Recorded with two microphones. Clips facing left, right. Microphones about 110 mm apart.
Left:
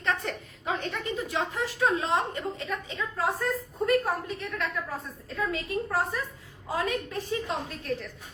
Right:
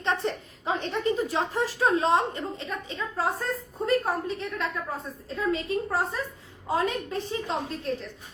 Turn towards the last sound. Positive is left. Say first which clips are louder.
# right 2 dB
turn(degrees=-25)  # may be behind; listen again after turning